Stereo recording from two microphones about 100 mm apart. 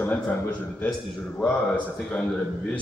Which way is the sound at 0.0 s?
20° left (ahead or behind).